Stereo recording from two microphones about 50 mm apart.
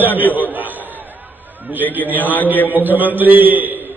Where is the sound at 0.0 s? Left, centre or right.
Left.